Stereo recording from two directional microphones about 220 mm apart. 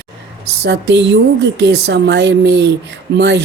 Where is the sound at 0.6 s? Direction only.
50° right (ahead or behind).